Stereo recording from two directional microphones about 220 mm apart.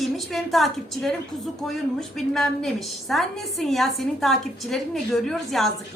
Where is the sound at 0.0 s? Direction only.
Centre (ahead or behind).